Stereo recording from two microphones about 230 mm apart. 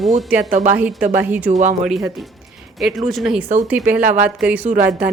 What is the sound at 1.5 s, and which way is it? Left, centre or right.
Speech, right.